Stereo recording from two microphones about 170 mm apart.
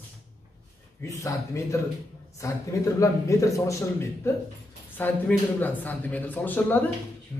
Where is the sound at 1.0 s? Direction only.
20° left (ahead or behind).